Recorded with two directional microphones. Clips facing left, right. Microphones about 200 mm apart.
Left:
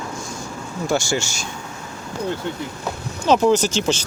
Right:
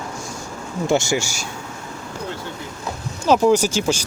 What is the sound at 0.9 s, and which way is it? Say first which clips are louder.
Speech: right 2 dB; 20° right (ahead or behind).